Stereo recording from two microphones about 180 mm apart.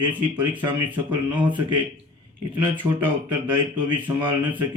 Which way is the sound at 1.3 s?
25° right (ahead or behind).